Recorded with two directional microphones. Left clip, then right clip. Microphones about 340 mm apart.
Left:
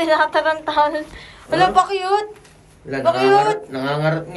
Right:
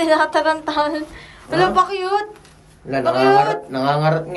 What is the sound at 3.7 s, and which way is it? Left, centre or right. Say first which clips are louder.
Speech: right 3 dB; centre.